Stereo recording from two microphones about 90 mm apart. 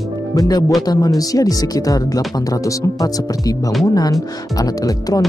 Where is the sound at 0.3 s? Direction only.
45° left (ahead or behind).